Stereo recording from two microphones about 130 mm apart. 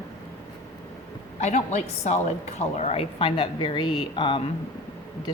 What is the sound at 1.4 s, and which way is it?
A woman's voice, 60° left (ahead or behind).